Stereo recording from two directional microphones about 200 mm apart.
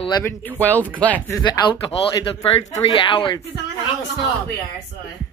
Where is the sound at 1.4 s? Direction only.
20° left (ahead or behind).